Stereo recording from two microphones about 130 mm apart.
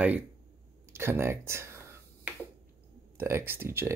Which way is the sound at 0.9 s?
20° right (ahead or behind).